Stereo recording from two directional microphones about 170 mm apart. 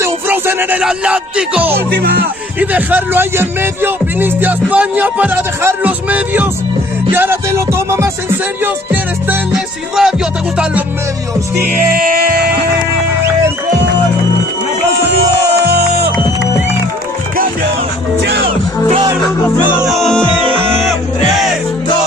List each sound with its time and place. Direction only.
0.0 s music: 15° right (ahead or behind)
2.0 s music: 70° right (ahead or behind)
2.6 s speech: 10° right (ahead or behind)
11.6 s music: 60° right (ahead or behind)
15.6 s music: 65° right (ahead or behind)
18.2 s music: 85° right
19.9 s music: centre (ahead or behind)